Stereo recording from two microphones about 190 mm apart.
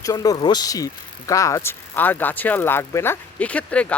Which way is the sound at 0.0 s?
20° left (ahead or behind).